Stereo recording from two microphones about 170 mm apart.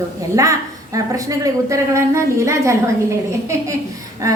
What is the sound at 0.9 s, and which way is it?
A woman's voice, 20° right (ahead or behind).